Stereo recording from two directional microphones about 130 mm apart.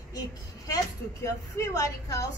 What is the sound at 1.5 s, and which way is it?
Speech, 25° left (ahead or behind).